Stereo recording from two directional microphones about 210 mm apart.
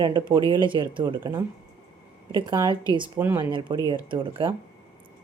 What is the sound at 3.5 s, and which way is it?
A woman's voice, 20° right (ahead or behind).